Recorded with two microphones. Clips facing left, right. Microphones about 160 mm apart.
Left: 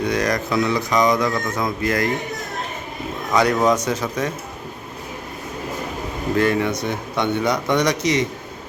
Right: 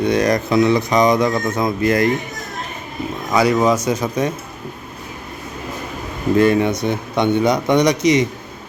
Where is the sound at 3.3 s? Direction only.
5° right (ahead or behind).